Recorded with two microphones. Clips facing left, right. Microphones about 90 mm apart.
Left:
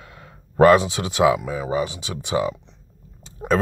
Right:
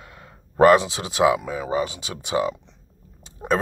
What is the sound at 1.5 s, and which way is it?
Speech, 40° right (ahead or behind).